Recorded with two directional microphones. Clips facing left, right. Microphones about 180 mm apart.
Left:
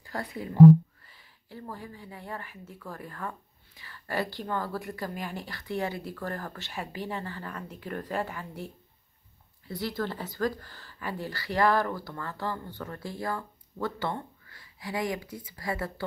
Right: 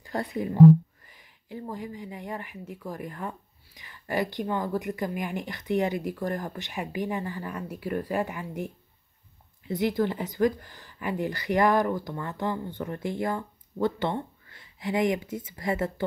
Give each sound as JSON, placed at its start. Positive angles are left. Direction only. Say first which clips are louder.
{"t": 0.0, "sound": "speech", "louder": "right 6 dB", "side_deg": -20}